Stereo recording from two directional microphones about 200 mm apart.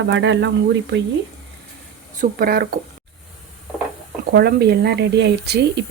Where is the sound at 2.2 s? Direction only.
45° right (ahead or behind).